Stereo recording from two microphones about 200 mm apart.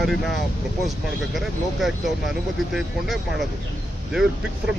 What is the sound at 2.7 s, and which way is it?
Speech, centre (ahead or behind).